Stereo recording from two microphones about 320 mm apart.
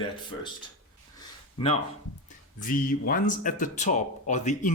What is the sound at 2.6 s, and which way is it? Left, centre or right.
Speech, left.